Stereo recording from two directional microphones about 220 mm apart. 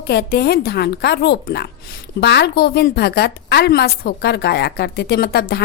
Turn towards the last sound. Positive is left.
turn(degrees=45)  # may be behind; listen again after turning